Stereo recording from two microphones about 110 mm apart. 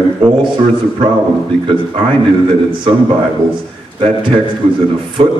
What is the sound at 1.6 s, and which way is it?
Speech, 55° right (ahead or behind).